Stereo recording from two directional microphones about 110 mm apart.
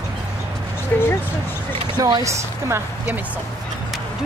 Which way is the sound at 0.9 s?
15° left (ahead or behind).